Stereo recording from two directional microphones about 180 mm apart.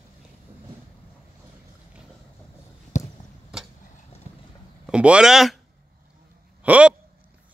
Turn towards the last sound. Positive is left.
turn(degrees=-10)  # may be behind; listen again after turning